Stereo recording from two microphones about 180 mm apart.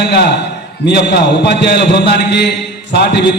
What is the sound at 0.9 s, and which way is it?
A man's voice, 65° left (ahead or behind).